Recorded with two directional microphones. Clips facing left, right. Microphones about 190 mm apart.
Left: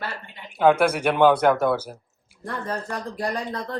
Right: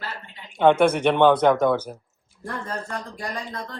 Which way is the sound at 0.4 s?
5° left (ahead or behind).